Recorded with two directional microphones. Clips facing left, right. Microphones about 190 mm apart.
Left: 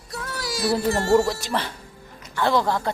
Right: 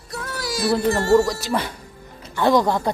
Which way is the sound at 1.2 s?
Centre (ahead or behind).